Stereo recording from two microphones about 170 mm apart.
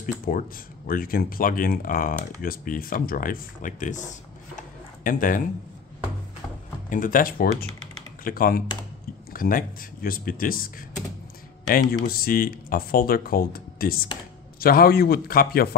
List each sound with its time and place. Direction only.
0.0 s speech: 50° left (ahead or behind)
6.9 s speech: 55° left (ahead or behind)
12.1 s speech: 60° left (ahead or behind)